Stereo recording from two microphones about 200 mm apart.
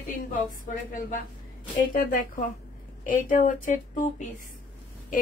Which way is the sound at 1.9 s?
40° left (ahead or behind).